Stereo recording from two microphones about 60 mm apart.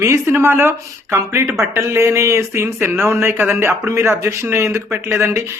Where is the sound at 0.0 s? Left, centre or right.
Right.